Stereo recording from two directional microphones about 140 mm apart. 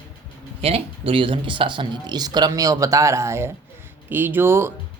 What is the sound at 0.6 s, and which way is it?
Speech, 40° right (ahead or behind).